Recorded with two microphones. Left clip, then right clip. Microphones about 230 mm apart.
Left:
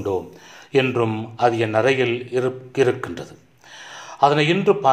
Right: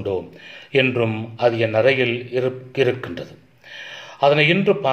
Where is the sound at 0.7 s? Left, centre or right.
Centre.